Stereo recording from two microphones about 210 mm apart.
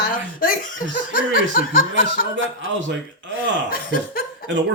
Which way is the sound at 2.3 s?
65° right (ahead or behind).